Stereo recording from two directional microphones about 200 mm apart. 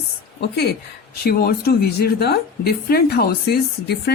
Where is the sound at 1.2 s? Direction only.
50° left (ahead or behind).